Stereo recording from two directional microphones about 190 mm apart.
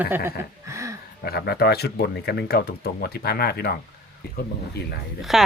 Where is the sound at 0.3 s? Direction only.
15° right (ahead or behind).